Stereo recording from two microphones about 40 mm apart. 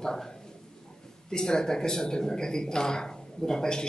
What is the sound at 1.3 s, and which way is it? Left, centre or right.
Speech, centre.